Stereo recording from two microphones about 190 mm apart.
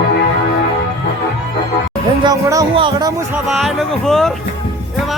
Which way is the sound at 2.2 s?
20° right (ahead or behind).